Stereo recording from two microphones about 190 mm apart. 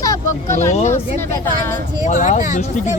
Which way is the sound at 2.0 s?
40° left (ahead or behind).